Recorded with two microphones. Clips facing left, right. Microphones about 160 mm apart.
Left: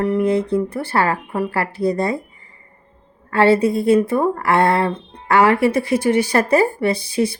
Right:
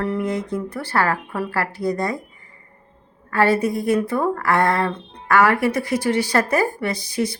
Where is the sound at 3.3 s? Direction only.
25° left (ahead or behind).